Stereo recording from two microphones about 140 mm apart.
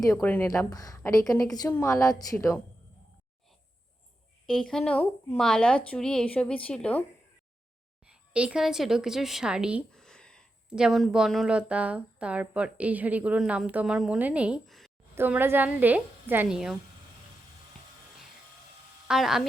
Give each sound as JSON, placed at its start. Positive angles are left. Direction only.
{"t": 0.0, "sound": "a woman's voice", "side_deg": 20}
{"t": 4.4, "sound": "a woman's voice", "side_deg": 5}
{"t": 8.1, "sound": "a woman's voice", "side_deg": -10}
{"t": 9.9, "sound": "a sound", "side_deg": 5}
{"t": 10.7, "sound": "speech", "side_deg": -5}
{"t": 15.1, "sound": "a woman's voice", "side_deg": -15}
{"t": 19.0, "sound": "a woman's voice", "side_deg": -5}